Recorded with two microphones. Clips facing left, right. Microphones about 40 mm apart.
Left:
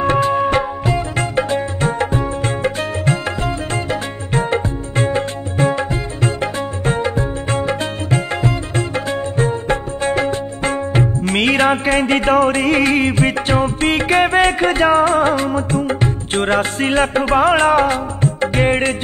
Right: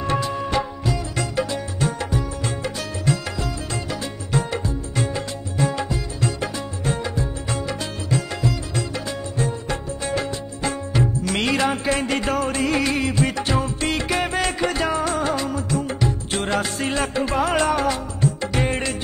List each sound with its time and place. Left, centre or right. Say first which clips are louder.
0.0 s music: left 9 dB; left